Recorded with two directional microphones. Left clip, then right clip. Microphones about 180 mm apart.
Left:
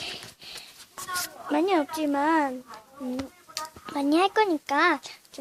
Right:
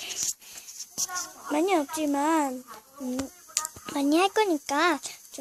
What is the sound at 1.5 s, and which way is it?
A child's voice, 15° right (ahead or behind).